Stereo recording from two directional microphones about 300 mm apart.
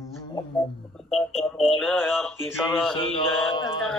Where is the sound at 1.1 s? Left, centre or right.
Centre.